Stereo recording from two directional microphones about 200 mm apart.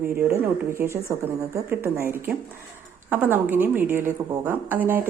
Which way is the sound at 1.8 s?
10° right (ahead or behind).